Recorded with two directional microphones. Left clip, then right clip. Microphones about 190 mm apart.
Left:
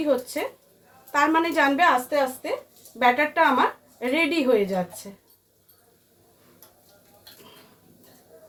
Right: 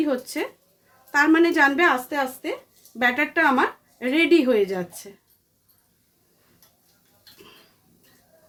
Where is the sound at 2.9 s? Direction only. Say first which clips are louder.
Left 1 dB; 65° right (ahead or behind).